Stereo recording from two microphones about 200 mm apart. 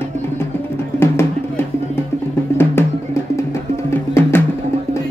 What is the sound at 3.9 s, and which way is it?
Music, 10° left (ahead or behind).